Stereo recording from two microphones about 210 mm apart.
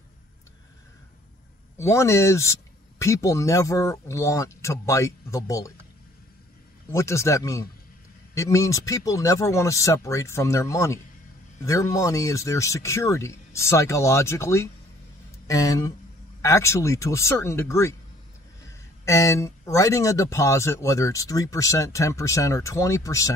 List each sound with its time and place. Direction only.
1.8 s speech: 15° left (ahead or behind)
6.9 s speech: 15° left (ahead or behind)